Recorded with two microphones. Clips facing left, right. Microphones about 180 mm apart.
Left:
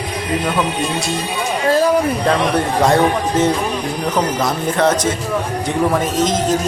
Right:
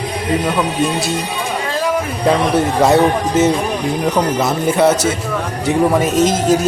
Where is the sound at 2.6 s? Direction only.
5° right (ahead or behind).